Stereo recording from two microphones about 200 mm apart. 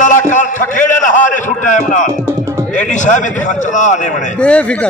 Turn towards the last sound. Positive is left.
turn(degrees=5)  # may be behind; listen again after turning